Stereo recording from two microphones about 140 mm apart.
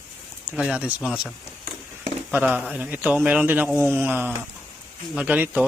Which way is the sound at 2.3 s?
10° right (ahead or behind).